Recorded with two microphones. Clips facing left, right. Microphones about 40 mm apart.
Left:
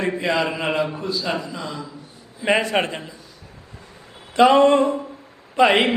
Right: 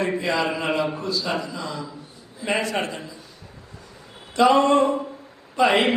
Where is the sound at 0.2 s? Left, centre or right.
Centre.